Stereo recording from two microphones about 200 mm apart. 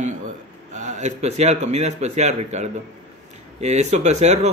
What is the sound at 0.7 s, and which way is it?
Speech, 35° right (ahead or behind).